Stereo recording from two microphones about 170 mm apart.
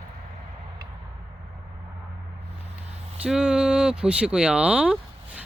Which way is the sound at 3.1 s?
5° right (ahead or behind).